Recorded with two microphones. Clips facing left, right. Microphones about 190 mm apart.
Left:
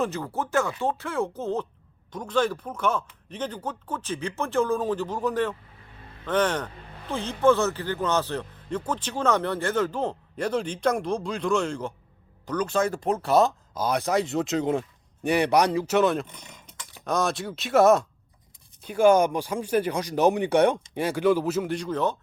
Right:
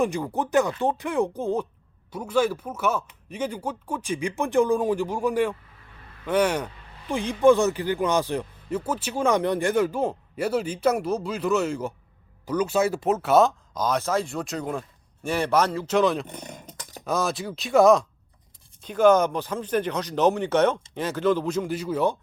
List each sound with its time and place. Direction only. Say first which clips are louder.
0.0 s speech: right 3 dB; 15° right (ahead or behind)
13.8 s speech: even; 15° left (ahead or behind)
16.0 s speech: right 1 dB; centre (ahead or behind)
16.2 s a sound: right 9 dB; 45° right (ahead or behind)
17.1 s speech: even; centre (ahead or behind)